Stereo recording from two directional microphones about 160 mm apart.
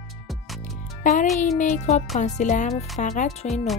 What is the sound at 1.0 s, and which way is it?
Speech, 55° left (ahead or behind).